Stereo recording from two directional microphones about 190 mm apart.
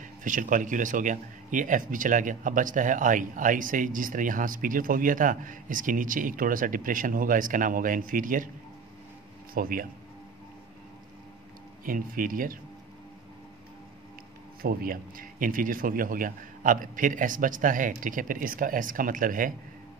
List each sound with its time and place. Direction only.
0.0 s a man's voice: 45° right (ahead or behind)
9.5 s a man's voice: 50° right (ahead or behind)
11.8 s a man's voice: 45° right (ahead or behind)
14.6 s a man's voice: 50° right (ahead or behind)